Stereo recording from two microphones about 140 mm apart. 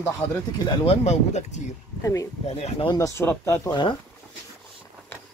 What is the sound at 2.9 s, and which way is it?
Speech, 25° left (ahead or behind).